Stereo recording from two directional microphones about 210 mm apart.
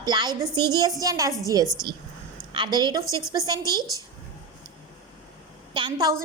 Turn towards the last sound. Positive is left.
turn(degrees=-20)  # may be behind; listen again after turning